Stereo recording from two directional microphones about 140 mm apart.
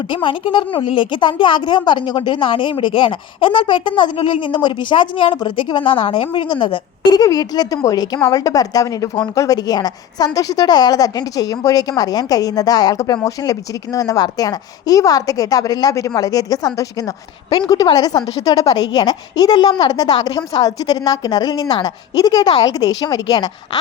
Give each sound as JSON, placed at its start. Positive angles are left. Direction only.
{"t": 0.1, "sound": "a woman's voice", "side_deg": 35}